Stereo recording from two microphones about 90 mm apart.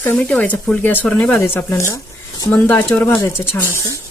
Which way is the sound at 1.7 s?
35° left (ahead or behind).